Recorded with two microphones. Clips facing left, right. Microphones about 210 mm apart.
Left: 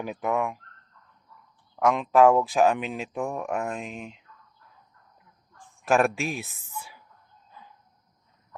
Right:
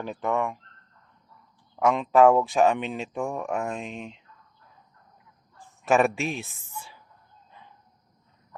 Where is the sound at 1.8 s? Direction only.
Centre (ahead or behind).